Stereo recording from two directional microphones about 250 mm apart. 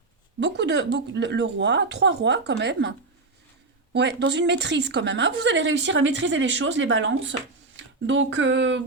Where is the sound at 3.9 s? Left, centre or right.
Right.